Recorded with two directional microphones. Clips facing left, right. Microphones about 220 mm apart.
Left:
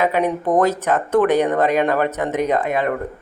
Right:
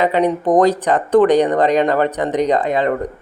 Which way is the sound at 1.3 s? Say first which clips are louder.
Right 3 dB; 5° left (ahead or behind).